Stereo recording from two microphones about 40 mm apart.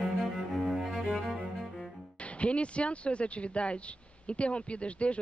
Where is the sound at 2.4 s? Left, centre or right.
Left.